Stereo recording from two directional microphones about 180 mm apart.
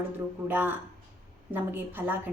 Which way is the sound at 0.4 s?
10° right (ahead or behind).